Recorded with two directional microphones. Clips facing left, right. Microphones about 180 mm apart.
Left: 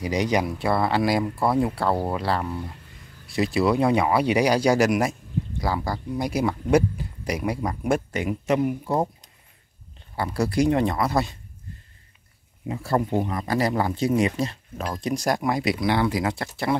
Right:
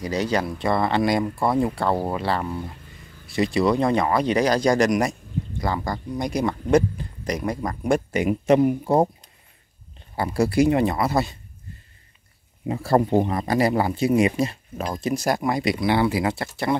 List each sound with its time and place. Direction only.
0.0 s speech: 15° left (ahead or behind)
8.1 s a man's voice: 15° right (ahead or behind)
8.5 s speech: 35° right (ahead or behind)
10.1 s speech: 10° right (ahead or behind)
12.6 s speech: 35° right (ahead or behind)
13.6 s speech: 10° right (ahead or behind)